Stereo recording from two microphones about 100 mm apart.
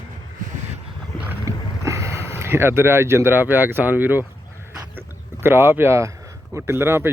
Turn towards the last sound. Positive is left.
turn(degrees=-25)  # may be behind; listen again after turning